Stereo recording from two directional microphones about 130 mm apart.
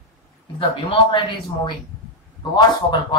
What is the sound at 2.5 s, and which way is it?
Speech, 35° left (ahead or behind).